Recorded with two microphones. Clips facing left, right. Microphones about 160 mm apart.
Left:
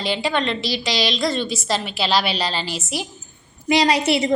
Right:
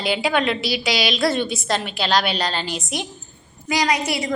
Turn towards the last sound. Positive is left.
turn(degrees=25)  # may be behind; listen again after turning